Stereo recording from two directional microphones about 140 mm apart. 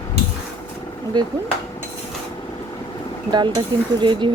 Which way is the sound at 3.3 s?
30° right (ahead or behind).